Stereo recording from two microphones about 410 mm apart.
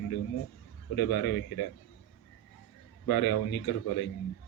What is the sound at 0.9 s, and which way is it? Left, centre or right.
Speech, left.